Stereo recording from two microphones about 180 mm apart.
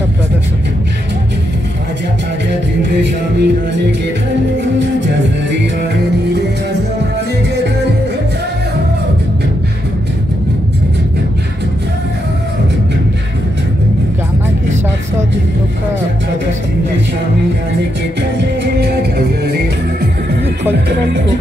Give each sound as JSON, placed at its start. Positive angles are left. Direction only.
{"t": 2.9, "sound": "music", "side_deg": -70}
{"t": 5.8, "sound": "music", "side_deg": -70}
{"t": 18.4, "sound": "music", "side_deg": -60}